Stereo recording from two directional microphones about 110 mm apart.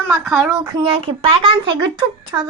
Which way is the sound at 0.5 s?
40° right (ahead or behind).